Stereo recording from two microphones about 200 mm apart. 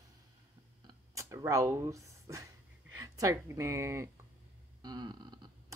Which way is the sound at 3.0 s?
15° right (ahead or behind).